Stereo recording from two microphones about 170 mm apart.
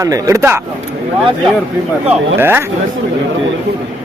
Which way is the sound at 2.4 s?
15° right (ahead or behind).